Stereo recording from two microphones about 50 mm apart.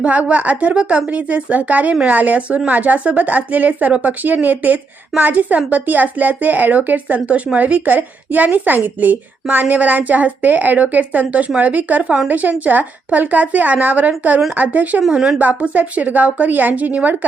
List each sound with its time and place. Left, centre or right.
0.0 s a woman's voice: right
15.1 s a woman's voice: centre
15.4 s a woman's voice: right